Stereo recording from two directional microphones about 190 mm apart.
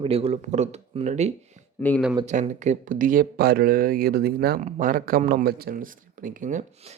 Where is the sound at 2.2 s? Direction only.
40° right (ahead or behind).